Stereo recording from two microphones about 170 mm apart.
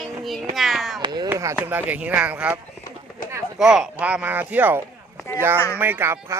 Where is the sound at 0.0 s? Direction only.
Centre (ahead or behind).